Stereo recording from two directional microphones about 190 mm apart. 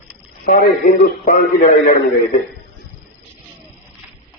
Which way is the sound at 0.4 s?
50° left (ahead or behind).